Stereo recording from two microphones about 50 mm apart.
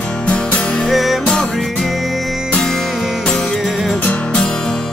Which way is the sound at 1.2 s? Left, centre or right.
Centre.